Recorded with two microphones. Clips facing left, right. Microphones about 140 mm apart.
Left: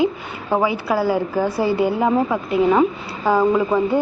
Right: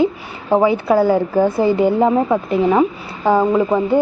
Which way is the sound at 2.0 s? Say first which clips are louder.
Right 3 dB; 25° right (ahead or behind).